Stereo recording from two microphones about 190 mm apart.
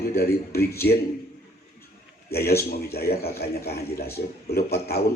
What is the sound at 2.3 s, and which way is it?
A man's voice, 55° left (ahead or behind).